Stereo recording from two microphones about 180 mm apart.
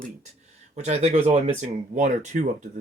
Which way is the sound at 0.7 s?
35° right (ahead or behind).